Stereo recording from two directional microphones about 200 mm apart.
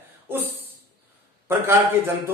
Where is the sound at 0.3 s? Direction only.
10° right (ahead or behind).